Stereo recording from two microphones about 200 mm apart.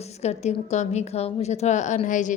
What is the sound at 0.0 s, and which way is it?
A woman's voice, 35° left (ahead or behind).